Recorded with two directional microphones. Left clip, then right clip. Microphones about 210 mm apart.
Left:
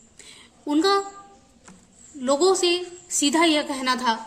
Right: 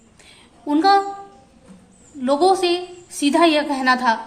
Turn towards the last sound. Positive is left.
turn(degrees=25)  # may be behind; listen again after turning